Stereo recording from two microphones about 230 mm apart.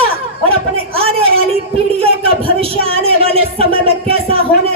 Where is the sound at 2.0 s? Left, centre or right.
Right.